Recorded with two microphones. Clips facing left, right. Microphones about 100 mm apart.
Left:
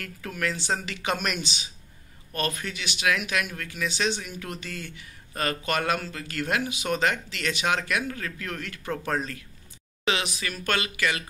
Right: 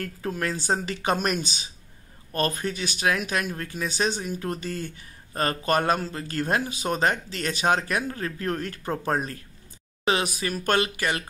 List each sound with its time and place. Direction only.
0.0 s speech: 35° right (ahead or behind)